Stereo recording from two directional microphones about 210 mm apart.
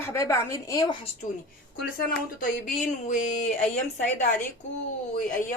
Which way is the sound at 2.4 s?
35° left (ahead or behind).